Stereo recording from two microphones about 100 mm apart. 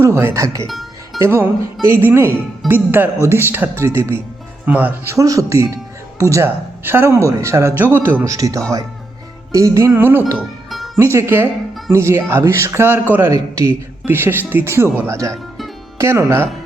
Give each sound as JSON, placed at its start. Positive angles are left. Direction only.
{"t": 0.0, "sound": "speech", "side_deg": -25}
{"t": 0.7, "sound": "music", "side_deg": 0}
{"t": 1.2, "sound": "speech", "side_deg": -25}
{"t": 4.6, "sound": "speech", "side_deg": -15}
{"t": 5.1, "sound": "speech", "side_deg": -35}
{"t": 8.3, "sound": "speech", "side_deg": -35}
{"t": 10.7, "sound": "music", "side_deg": 0}
{"t": 10.9, "sound": "speech", "side_deg": -30}